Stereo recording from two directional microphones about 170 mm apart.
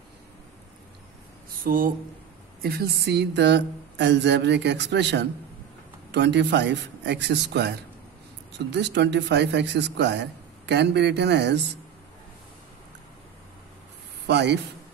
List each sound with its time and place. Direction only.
1.6 s speech: 55° right (ahead or behind)
2.6 s a sound: 70° right (ahead or behind); by 10.2 s 90° right
10.7 s speech: 85° right
14.2 s a man's voice: 85° right